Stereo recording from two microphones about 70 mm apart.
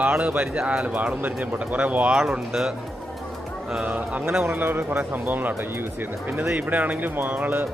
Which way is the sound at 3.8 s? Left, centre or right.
Centre.